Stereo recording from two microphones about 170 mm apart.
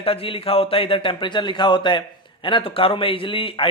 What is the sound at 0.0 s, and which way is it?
A man's voice, 35° left (ahead or behind).